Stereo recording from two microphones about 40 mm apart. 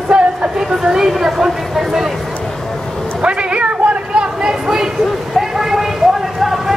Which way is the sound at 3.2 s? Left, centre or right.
Right.